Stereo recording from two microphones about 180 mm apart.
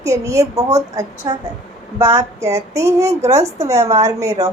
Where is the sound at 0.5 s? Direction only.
35° right (ahead or behind).